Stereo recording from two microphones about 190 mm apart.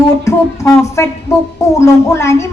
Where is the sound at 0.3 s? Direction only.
15° left (ahead or behind).